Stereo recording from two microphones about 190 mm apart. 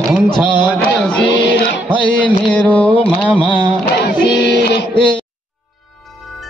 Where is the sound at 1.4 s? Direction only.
70° left (ahead or behind).